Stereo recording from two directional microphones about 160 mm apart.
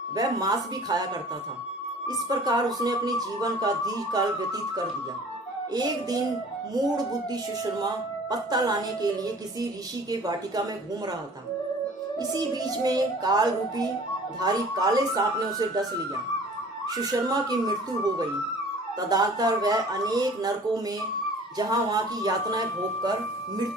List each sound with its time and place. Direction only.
0.2 s a child's voice: 25° right (ahead or behind)
2.0 s a child's voice: 25° right (ahead or behind)
5.7 s a child's voice: 25° right (ahead or behind)
8.3 s a child's voice: 25° right (ahead or behind)
12.2 s a child's voice: 25° right (ahead or behind)
17.0 s a child's voice: 25° right (ahead or behind)
18.9 s a child's voice: 25° right (ahead or behind)
21.6 s a child's voice: 25° right (ahead or behind)